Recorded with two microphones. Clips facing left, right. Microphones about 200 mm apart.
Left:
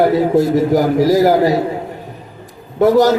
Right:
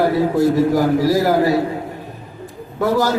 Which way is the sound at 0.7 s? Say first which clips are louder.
Left 3 dB; 20° left (ahead or behind).